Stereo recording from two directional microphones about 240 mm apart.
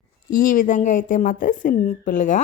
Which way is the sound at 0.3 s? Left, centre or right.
Left.